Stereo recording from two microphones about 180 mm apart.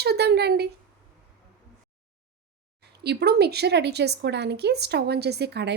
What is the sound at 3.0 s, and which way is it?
Speech, 65° right (ahead or behind).